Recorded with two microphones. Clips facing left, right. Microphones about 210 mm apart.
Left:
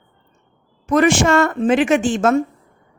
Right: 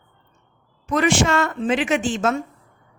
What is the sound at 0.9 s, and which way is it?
A woman's voice, 45° left (ahead or behind).